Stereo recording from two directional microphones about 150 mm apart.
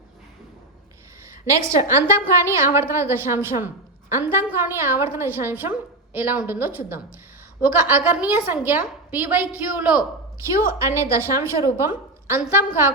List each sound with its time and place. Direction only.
1.3 s a woman's voice: 20° right (ahead or behind)
10.7 s a woman's voice: 20° right (ahead or behind)